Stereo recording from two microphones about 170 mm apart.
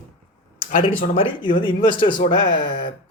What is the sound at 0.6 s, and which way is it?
Speech, 55° left (ahead or behind).